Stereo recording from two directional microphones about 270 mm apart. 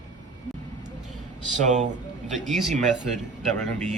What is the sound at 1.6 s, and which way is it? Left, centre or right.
Speech, right.